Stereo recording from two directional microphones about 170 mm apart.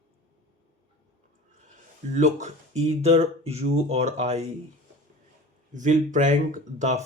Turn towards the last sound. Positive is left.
turn(degrees=-45)  # may be behind; listen again after turning